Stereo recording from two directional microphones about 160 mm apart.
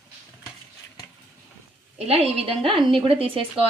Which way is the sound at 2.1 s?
40° right (ahead or behind).